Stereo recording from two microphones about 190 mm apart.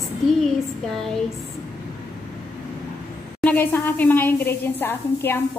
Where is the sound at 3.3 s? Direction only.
10° left (ahead or behind).